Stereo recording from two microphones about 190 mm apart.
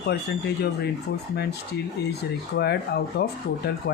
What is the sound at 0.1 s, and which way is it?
Speech, 60° left (ahead or behind).